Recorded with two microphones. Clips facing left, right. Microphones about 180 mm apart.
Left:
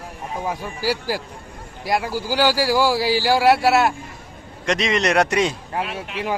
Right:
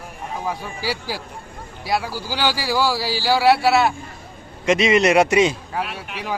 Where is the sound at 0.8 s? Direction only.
45° left (ahead or behind).